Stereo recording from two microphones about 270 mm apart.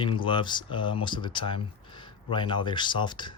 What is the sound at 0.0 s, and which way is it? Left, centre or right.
Speech, centre.